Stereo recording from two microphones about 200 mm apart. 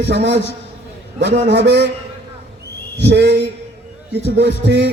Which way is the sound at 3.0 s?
60° right (ahead or behind).